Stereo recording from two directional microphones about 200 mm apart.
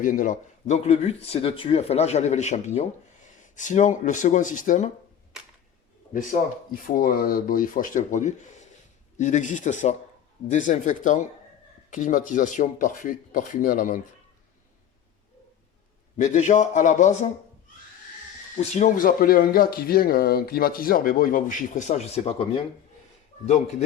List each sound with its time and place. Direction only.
0.0 s speech: 40° left (ahead or behind)
6.1 s speech: 45° left (ahead or behind)
16.1 s speech: 35° left (ahead or behind)
18.5 s speech: 40° left (ahead or behind)